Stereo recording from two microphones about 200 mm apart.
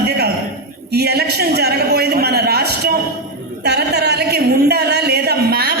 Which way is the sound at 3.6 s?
55° right (ahead or behind).